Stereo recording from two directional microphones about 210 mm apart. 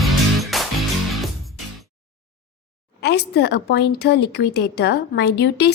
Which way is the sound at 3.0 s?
50° left (ahead or behind).